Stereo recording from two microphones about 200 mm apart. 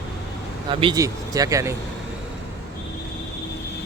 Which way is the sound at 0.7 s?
25° right (ahead or behind).